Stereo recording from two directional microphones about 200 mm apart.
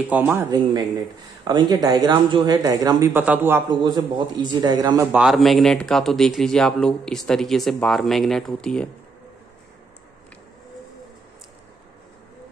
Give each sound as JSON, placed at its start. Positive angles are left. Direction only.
{"t": 0.1, "sound": "speech", "side_deg": -10}
{"t": 1.4, "sound": "speech", "side_deg": -20}
{"t": 3.8, "sound": "a man's voice", "side_deg": -20}
{"t": 5.1, "sound": "speech", "side_deg": 0}